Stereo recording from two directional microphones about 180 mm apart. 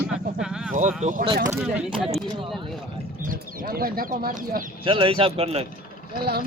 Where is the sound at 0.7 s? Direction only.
45° right (ahead or behind).